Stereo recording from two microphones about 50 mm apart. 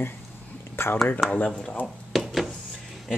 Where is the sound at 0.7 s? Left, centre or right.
Left.